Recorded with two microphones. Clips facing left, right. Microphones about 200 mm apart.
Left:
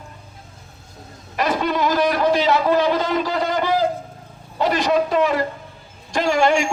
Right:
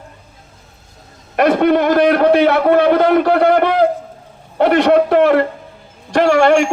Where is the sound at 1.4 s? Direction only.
60° right (ahead or behind).